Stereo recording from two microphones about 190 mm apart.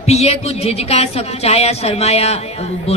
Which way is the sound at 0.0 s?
35° left (ahead or behind).